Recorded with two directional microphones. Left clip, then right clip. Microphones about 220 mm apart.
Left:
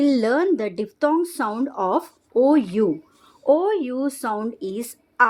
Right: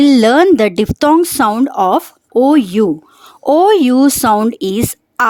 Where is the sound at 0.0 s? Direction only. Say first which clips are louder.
Right 11 dB; 40° right (ahead or behind).